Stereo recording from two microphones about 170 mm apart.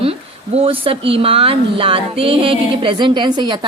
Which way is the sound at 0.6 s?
35° right (ahead or behind).